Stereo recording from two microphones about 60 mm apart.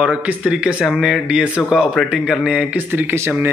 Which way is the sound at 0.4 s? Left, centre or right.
Centre.